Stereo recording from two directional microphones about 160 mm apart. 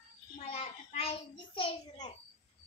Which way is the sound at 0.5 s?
40° left (ahead or behind).